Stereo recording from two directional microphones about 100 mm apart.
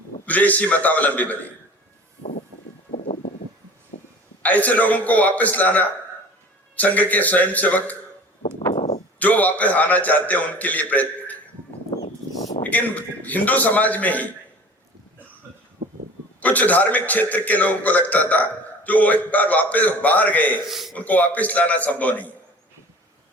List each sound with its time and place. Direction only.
0.3 s a man's voice: 15° left (ahead or behind)
4.4 s a man's voice: 15° left (ahead or behind)
8.7 s a sound: 75° left (ahead or behind)
9.1 s a man's voice: 15° left (ahead or behind)
12.6 s a man's voice: 15° left (ahead or behind)
15.8 s a sound: 90° right
16.4 s a man's voice: 15° left (ahead or behind)
20.7 s a man's voice: centre (ahead or behind)
20.9 s a man's voice: 15° left (ahead or behind)